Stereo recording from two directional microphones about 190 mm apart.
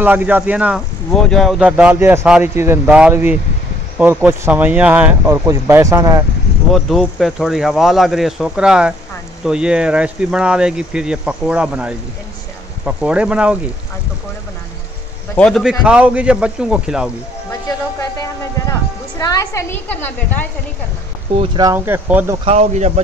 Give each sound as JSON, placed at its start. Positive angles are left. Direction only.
{"t": 0.0, "sound": "speech", "side_deg": -10}
{"t": 6.7, "sound": "speech", "side_deg": 0}
{"t": 15.3, "sound": "speech", "side_deg": 5}
{"t": 17.5, "sound": "music", "side_deg": 15}
{"t": 21.5, "sound": "speech", "side_deg": -15}
{"t": 22.4, "sound": "speech", "side_deg": -35}